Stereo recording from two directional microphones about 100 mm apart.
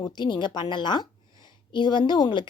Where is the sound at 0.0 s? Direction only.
50° left (ahead or behind).